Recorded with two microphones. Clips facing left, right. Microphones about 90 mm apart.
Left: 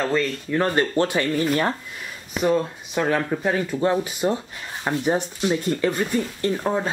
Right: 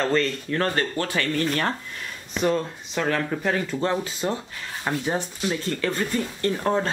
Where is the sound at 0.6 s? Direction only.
20° left (ahead or behind).